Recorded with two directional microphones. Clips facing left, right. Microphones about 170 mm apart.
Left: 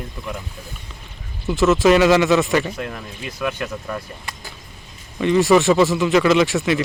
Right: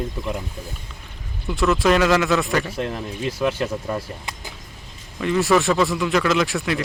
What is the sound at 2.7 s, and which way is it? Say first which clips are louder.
Speech: right 3 dB; 30° right (ahead or behind).